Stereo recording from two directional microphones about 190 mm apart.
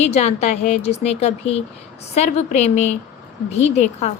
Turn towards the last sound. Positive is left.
turn(degrees=35)  # may be behind; listen again after turning